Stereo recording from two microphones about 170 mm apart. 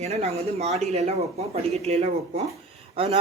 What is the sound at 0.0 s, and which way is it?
Speech, 40° right (ahead or behind).